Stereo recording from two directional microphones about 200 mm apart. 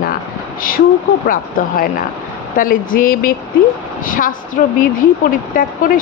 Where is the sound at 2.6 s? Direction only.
45° left (ahead or behind).